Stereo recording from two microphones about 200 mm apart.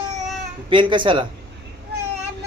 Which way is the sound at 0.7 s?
25° right (ahead or behind).